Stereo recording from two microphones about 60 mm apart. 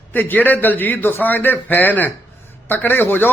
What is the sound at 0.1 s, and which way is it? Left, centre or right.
Speech, left.